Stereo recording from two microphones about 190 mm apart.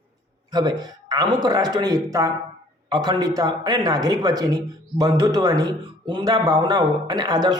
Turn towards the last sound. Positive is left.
turn(degrees=-20)  # may be behind; listen again after turning